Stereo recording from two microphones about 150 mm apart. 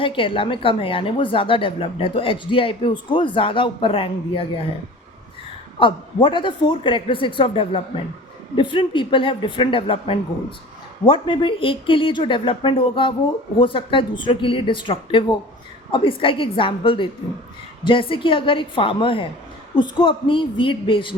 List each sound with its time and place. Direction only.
0.0 s a woman's voice: 35° left (ahead or behind)
5.8 s a woman's voice: 35° left (ahead or behind)